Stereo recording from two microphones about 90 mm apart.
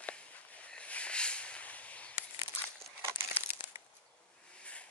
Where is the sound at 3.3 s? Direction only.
20° right (ahead or behind).